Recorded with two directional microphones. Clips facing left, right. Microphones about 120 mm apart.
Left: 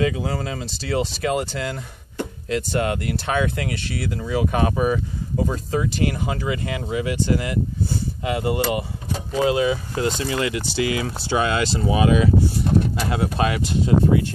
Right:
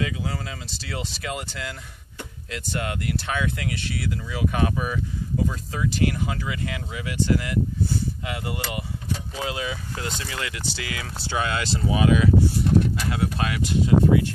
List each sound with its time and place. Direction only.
0.0 s speech: 40° left (ahead or behind)
5.9 s speech: 25° left (ahead or behind)